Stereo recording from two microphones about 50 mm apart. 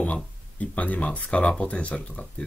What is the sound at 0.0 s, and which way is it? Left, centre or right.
Speech, left.